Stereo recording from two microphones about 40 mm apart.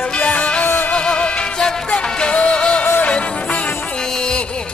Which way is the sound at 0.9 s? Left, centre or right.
Left.